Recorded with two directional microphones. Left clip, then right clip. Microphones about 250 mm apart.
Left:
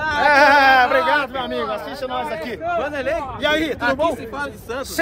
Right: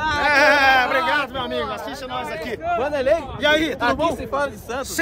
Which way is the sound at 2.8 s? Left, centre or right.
Right.